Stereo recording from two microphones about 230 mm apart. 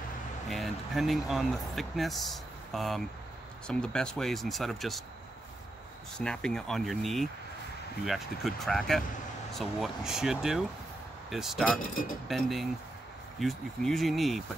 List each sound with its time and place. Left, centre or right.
0.5 s speech: centre
6.1 s speech: centre
11.9 s speech: left
12.3 s speech: centre